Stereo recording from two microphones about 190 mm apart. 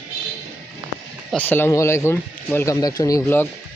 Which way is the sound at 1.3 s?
10° left (ahead or behind).